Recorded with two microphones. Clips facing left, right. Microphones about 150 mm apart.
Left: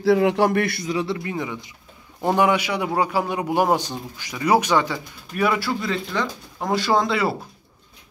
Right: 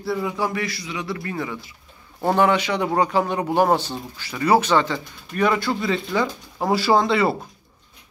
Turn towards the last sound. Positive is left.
turn(degrees=0)  # may be behind; listen again after turning